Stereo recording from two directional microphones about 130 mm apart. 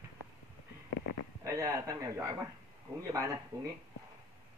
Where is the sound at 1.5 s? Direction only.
25° right (ahead or behind).